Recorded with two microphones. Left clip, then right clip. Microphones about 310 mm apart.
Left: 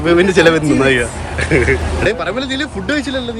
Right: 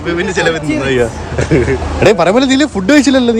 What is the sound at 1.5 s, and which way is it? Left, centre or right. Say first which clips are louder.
Speech: even; centre.